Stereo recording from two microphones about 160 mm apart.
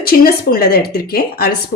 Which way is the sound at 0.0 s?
70° left (ahead or behind).